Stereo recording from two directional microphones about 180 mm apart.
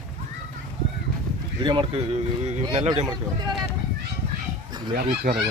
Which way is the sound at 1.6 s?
30° right (ahead or behind).